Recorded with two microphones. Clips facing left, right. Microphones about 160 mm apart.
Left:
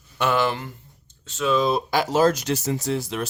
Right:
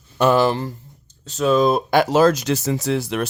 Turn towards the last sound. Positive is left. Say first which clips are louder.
# right 4 dB
turn(degrees=-70)  # may be behind; listen again after turning